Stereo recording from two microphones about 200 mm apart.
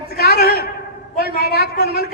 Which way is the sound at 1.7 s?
50° left (ahead or behind).